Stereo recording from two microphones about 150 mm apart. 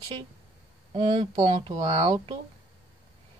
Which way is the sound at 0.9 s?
35° right (ahead or behind).